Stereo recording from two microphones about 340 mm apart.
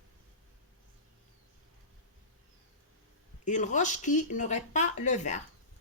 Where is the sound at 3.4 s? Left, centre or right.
Left.